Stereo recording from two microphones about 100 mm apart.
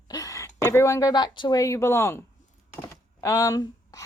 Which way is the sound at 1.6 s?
30° left (ahead or behind).